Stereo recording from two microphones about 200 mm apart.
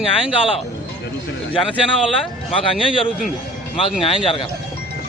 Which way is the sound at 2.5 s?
25° left (ahead or behind).